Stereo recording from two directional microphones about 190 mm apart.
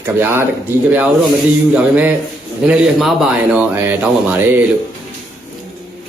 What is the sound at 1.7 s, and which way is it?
Speech, 10° right (ahead or behind).